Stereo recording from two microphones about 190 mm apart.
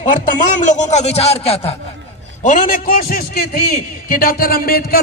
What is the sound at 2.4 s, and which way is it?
A man's voice, 45° left (ahead or behind).